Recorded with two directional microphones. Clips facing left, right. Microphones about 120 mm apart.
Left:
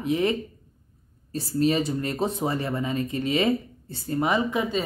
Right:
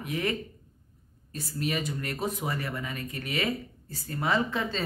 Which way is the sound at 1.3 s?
30° left (ahead or behind).